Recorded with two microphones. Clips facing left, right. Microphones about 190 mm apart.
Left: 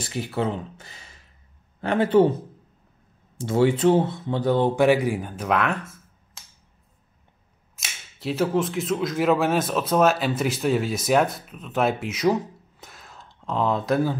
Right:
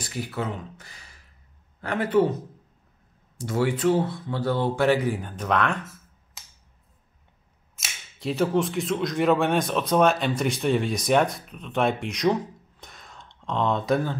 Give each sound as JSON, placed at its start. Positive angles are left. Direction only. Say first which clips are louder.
{"t": 0.0, "sound": "a man's voice", "louder": "left 4 dB", "side_deg": 25}
{"t": 6.4, "sound": "a sound", "louder": "even", "side_deg": 0}
{"t": 7.7, "sound": "speech", "louder": "left 1 dB", "side_deg": 0}